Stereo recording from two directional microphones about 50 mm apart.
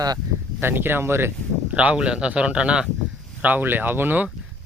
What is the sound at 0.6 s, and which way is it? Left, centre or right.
Speech, right.